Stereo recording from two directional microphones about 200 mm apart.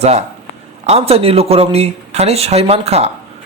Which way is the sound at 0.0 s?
35° right (ahead or behind).